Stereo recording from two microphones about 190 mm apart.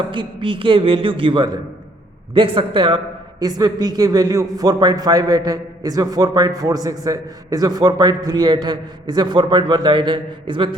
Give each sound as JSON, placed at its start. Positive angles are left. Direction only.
{"t": 0.1, "sound": "a man's voice", "side_deg": -25}